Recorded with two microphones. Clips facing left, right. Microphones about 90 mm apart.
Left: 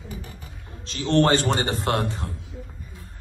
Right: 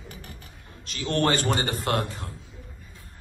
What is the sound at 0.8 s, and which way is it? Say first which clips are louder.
A man's voice: left 5 dB; 30° left (ahead or behind).